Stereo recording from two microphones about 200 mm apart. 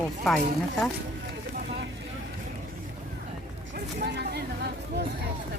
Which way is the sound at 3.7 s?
55° right (ahead or behind).